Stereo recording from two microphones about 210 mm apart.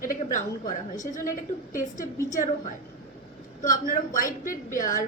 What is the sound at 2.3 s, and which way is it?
A woman's voice, 35° left (ahead or behind).